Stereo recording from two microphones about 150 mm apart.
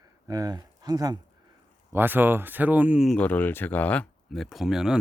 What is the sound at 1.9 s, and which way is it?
Speech, 15° right (ahead or behind).